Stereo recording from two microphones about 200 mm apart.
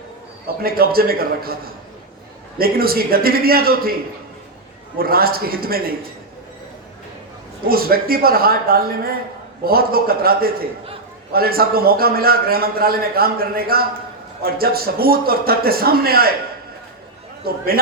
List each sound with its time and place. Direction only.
0.4 s a man's voice: 50° right (ahead or behind)
2.6 s a man's voice: 50° right (ahead or behind)
4.9 s a man's voice: 50° right (ahead or behind)
7.7 s a man's voice: 50° right (ahead or behind)
17.5 s a man's voice: 50° right (ahead or behind)